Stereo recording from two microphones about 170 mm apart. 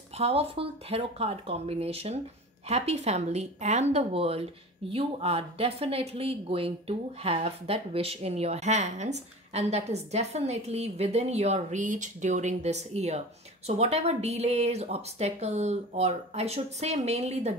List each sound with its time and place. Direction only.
0.2 s speech: 35° right (ahead or behind)